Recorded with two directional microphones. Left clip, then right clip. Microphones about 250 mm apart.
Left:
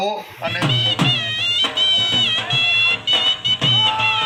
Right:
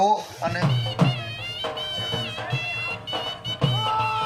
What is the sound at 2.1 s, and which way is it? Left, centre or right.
Music, right.